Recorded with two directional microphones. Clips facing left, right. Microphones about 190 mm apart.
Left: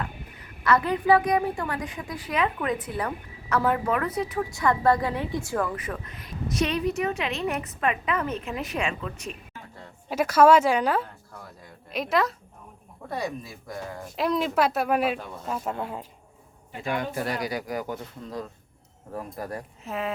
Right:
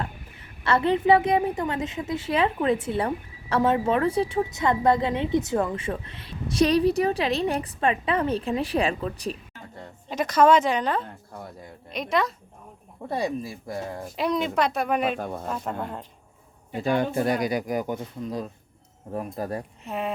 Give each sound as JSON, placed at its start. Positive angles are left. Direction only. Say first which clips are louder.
{"t": 0.3, "sound": "a woman's voice", "louder": "left 1 dB", "side_deg": -30}
{"t": 10.1, "sound": "a woman's voice", "louder": "left 1 dB", "side_deg": 5}
{"t": 13.1, "sound": "a woman's voice", "louder": "right 4 dB", "side_deg": -30}
{"t": 14.2, "sound": "speech", "louder": "left 1 dB", "side_deg": 0}
{"t": 16.8, "sound": "a woman's voice", "louder": "right 5 dB", "side_deg": -30}
{"t": 19.8, "sound": "speech", "louder": "left 1 dB", "side_deg": 0}